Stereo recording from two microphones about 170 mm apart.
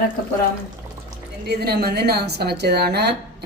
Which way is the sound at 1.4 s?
70° right (ahead or behind).